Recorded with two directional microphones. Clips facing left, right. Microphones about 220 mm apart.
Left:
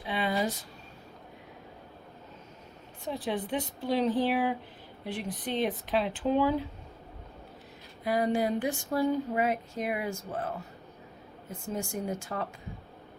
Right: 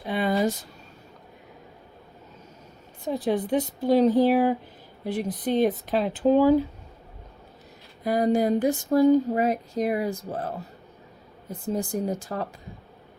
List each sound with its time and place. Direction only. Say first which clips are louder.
0.0 s a sound: right 6 dB; 45° right (ahead or behind)
3.1 s speech: right 7 dB; 40° right (ahead or behind)
8.0 s speech: right 5 dB; 40° right (ahead or behind)
11.6 s speech: right 7 dB; 35° right (ahead or behind)